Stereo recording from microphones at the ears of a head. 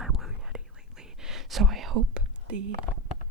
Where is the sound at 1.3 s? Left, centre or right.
Right.